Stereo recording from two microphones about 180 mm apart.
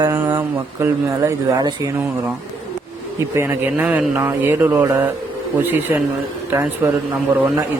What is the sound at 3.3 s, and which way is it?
Speech, 15° right (ahead or behind).